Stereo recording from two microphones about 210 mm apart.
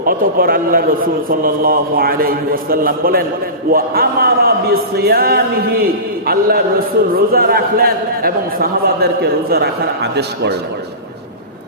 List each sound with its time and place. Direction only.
0.0 s a man's voice: 45° right (ahead or behind)